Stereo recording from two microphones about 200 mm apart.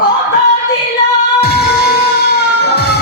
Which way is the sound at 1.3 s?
50° left (ahead or behind).